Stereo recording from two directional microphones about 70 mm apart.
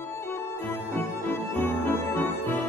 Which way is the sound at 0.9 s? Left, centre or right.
Left.